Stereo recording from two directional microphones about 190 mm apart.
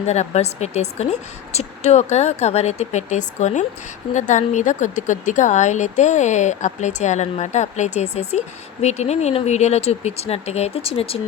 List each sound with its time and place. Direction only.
0.0 s speech: 35° left (ahead or behind)